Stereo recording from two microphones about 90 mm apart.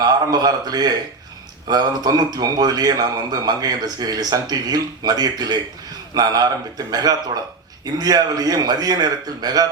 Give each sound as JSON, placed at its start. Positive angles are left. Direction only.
{"t": 0.0, "sound": "a man's voice", "side_deg": -45}